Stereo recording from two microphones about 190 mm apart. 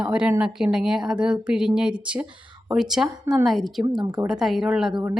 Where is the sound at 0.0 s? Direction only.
5° right (ahead or behind).